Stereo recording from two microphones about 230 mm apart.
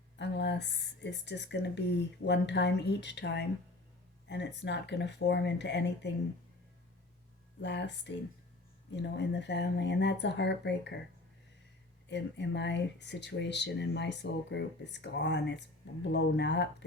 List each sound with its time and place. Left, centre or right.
0.2 s speech: left
7.6 s speech: left
12.0 s speech: left